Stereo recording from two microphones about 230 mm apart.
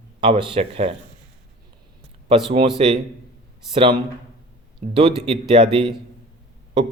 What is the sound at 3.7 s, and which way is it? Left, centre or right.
A man's voice, right.